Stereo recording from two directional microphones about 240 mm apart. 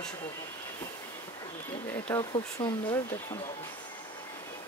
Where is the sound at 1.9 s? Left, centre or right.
Centre.